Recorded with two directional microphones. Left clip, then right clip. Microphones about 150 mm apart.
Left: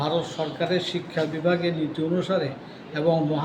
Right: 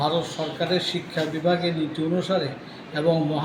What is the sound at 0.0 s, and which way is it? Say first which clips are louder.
A man's voice: right 1 dB; 5° left (ahead or behind).